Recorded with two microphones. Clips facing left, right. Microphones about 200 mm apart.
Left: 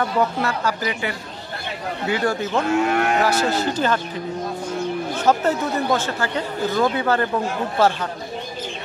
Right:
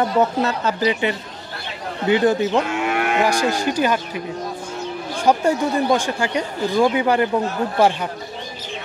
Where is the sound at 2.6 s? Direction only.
40° left (ahead or behind).